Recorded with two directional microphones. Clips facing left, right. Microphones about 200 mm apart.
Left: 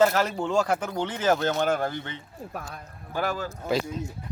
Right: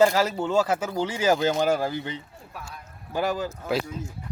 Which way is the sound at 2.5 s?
50° left (ahead or behind).